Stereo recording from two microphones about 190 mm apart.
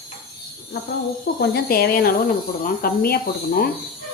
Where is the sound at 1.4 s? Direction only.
55° left (ahead or behind).